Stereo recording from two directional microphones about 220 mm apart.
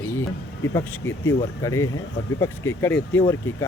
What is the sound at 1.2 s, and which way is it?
Speech, 15° left (ahead or behind).